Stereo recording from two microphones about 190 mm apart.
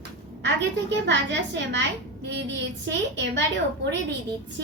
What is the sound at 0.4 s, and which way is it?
A woman's voice, 70° right (ahead or behind).